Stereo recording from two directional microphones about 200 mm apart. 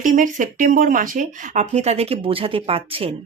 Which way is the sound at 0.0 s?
40° right (ahead or behind).